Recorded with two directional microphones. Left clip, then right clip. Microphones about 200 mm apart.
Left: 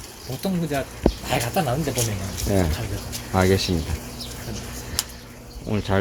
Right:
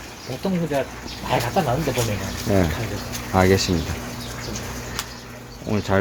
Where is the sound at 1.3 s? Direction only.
55° left (ahead or behind).